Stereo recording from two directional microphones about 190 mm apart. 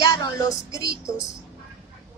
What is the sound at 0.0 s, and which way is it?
Speech, 20° left (ahead or behind).